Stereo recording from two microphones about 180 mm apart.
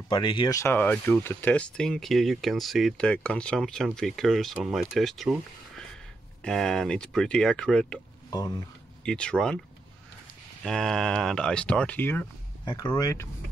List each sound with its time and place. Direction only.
0.1 s speech: 25° left (ahead or behind); by 8.0 s 5° left (ahead or behind)
8.3 s speech: 20° left (ahead or behind)
9.0 s speech: 5° left (ahead or behind)
10.6 s speech: 5° left (ahead or behind)
12.6 s speech: 20° left (ahead or behind)